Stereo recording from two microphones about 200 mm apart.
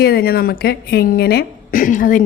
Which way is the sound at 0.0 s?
50° left (ahead or behind).